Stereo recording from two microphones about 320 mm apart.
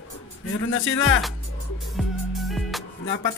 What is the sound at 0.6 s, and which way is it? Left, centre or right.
Speech, left.